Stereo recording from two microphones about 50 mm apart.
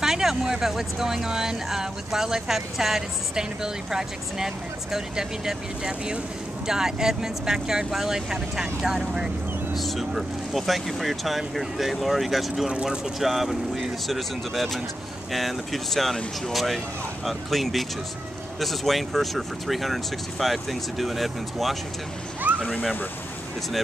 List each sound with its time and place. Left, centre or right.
0.0 s speech: centre
9.8 s speech: centre
12.6 s speech: centre
22.5 s a sound: right